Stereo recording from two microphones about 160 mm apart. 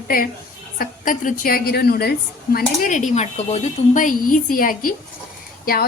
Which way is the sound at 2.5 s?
55° left (ahead or behind).